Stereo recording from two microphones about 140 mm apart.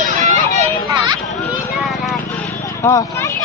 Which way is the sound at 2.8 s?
20° left (ahead or behind).